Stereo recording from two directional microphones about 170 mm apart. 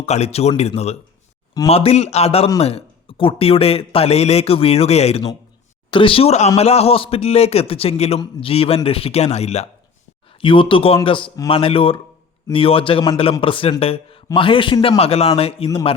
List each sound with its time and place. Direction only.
0.0 s speech: 40° left (ahead or behind)